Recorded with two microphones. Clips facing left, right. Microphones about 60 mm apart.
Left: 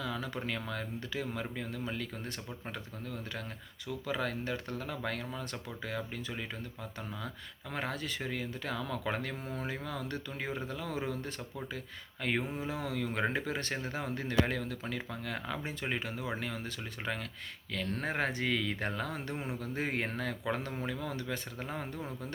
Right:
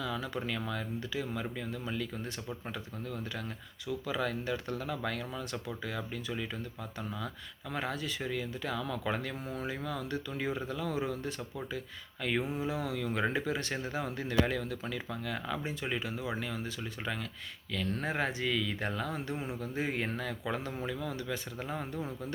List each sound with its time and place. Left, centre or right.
0.0 s speech: left
3.8 s speech: left
7.7 s speech: left